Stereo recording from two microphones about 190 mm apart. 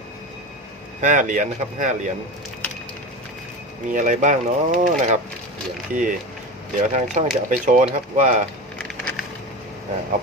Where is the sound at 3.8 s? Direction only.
40° right (ahead or behind).